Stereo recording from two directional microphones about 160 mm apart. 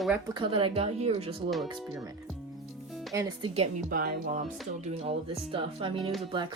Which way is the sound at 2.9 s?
Centre (ahead or behind).